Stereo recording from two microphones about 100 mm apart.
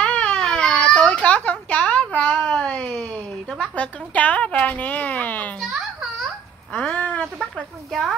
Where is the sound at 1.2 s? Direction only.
15° left (ahead or behind).